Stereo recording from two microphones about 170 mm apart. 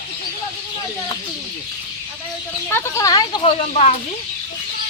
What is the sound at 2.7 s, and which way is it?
Speech, 15° left (ahead or behind).